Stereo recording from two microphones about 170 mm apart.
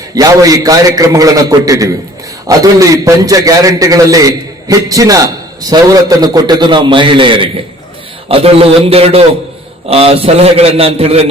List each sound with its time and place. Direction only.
0.1 s a man's voice: 20° right (ahead or behind); by 11.3 s 35° right (ahead or behind)